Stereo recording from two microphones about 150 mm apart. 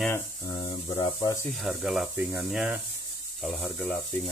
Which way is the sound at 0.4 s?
25° left (ahead or behind).